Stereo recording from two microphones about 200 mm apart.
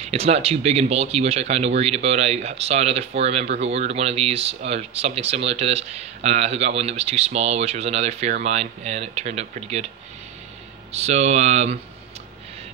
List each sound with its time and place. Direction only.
0.0 s speech: 30° right (ahead or behind)
10.9 s speech: 30° right (ahead or behind)